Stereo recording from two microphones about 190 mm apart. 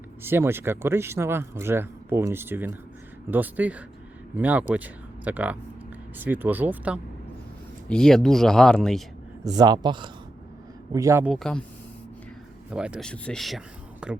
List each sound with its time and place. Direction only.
0.2 s speech: 10° right (ahead or behind)
7.9 s speech: 5° left (ahead or behind)
9.6 s speech: 20° right (ahead or behind)
11.3 s speech: centre (ahead or behind)
12.7 s speech: 5° right (ahead or behind)